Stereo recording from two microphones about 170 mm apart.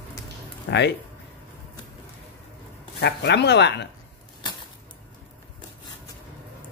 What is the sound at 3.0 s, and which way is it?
Speech, 80° left.